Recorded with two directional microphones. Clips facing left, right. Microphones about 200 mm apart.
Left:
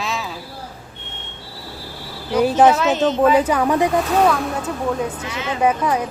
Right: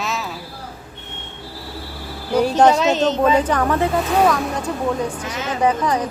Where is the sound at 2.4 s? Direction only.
5° left (ahead or behind).